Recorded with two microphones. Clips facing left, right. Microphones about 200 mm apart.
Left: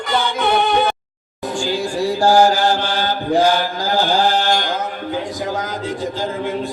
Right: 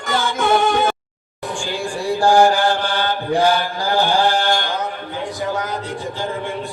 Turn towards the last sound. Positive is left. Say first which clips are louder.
# left 1 dB
turn(degrees=40)  # may be behind; listen again after turning